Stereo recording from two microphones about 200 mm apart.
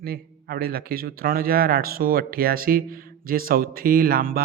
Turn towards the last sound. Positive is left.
turn(degrees=-45)  # may be behind; listen again after turning